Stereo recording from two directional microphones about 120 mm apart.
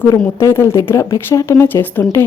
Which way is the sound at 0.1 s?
25° left (ahead or behind).